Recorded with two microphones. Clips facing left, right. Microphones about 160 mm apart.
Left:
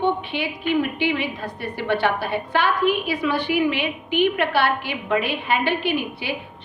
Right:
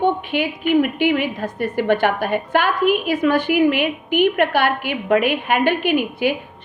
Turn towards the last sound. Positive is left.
turn(degrees=-50)  # may be behind; listen again after turning